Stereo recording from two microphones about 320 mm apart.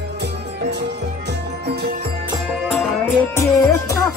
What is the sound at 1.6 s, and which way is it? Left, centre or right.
Music, right.